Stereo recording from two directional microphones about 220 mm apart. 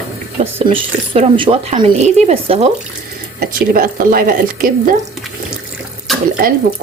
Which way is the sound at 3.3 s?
40° right (ahead or behind).